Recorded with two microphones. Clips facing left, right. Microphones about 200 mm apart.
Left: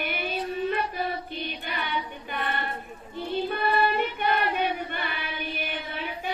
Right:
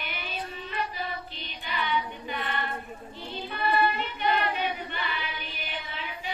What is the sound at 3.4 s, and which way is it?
Choir, 50° left (ahead or behind).